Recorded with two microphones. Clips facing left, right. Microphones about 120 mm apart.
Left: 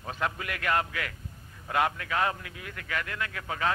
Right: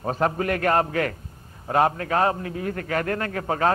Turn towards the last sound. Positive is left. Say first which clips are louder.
# right 8 dB
turn(degrees=-40)  # may be behind; listen again after turning